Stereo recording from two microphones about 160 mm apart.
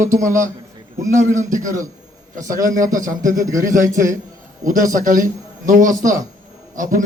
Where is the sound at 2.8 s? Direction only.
20° right (ahead or behind).